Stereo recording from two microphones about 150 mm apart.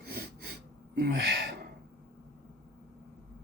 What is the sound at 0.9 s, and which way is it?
Gasp, 90° right.